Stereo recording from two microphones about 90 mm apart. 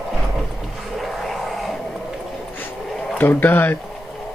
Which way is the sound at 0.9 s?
Centre (ahead or behind).